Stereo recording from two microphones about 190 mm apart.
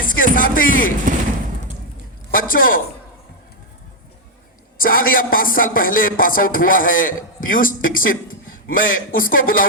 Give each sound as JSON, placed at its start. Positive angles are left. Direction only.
{"t": 0.0, "sound": "music", "side_deg": 45}
{"t": 2.3, "sound": "a man's voice", "side_deg": 50}
{"t": 4.8, "sound": "a man's voice", "side_deg": 50}